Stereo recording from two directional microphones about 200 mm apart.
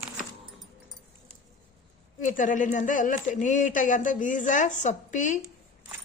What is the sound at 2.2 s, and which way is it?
Speech, 40° left (ahead or behind).